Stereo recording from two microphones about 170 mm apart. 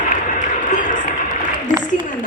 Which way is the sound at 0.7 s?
50° left (ahead or behind).